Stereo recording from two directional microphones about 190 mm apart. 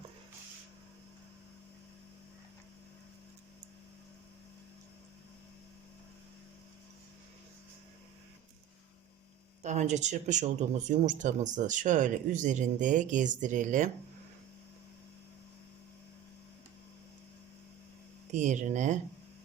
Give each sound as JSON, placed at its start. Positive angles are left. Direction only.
{"t": 9.6, "sound": "speech", "side_deg": -40}
{"t": 18.3, "sound": "speech", "side_deg": -40}